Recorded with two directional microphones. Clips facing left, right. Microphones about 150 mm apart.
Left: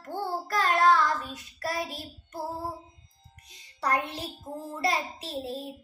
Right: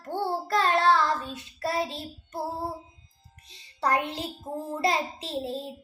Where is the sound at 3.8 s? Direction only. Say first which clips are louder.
Right 2 dB; 25° right (ahead or behind).